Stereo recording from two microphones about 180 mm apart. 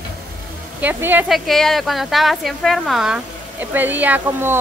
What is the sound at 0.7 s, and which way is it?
Speech, 10° right (ahead or behind).